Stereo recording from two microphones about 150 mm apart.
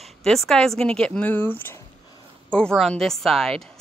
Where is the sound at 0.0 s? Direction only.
Centre (ahead or behind).